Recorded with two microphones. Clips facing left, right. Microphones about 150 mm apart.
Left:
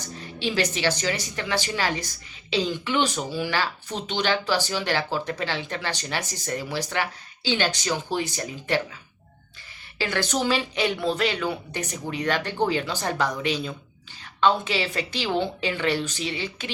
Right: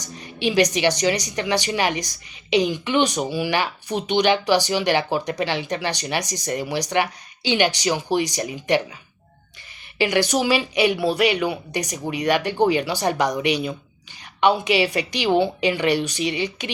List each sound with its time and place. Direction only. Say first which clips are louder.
0.0 s a woman's voice: right 5 dB; 15° right (ahead or behind)
10.0 s a woman's voice: right 6 dB; 15° right (ahead or behind)